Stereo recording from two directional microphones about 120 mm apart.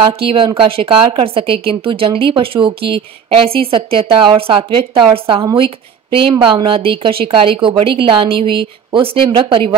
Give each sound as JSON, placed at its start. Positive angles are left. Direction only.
{"t": 0.2, "sound": "speech", "side_deg": -45}
{"t": 6.4, "sound": "speech", "side_deg": -45}